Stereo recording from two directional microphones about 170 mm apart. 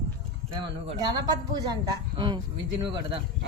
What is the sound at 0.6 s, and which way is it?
Speech, 25° right (ahead or behind).